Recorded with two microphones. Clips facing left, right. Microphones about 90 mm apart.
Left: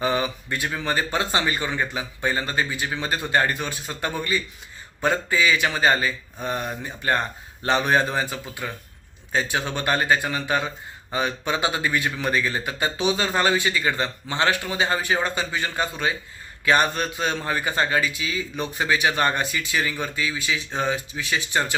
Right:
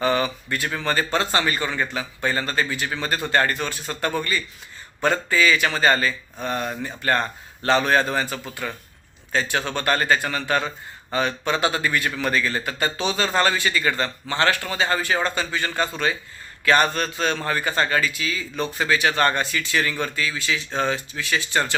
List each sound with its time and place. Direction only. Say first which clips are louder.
0.0 s a man's voice: right 2 dB; 15° left (ahead or behind)